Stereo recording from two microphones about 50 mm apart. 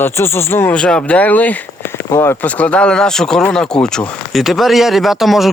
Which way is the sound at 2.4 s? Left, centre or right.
Left.